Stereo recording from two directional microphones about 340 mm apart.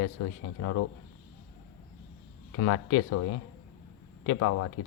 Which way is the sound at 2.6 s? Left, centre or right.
Left.